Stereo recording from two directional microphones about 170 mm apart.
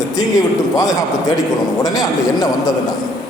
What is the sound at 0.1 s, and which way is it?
A man's voice, 20° left (ahead or behind).